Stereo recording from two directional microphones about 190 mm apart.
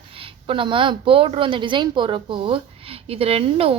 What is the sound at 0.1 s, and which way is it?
A woman's voice, 30° right (ahead or behind).